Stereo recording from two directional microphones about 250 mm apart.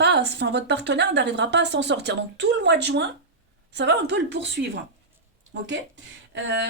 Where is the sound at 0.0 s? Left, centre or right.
Right.